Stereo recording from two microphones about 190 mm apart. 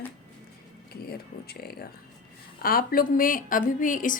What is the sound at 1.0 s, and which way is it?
A woman's voice, 55° left (ahead or behind).